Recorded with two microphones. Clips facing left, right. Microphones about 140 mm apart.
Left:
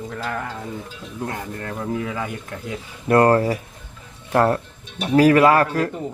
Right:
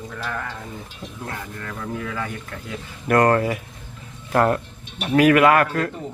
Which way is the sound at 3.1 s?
30° left (ahead or behind).